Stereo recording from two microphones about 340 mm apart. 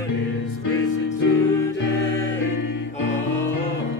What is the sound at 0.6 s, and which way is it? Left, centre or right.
Music, left.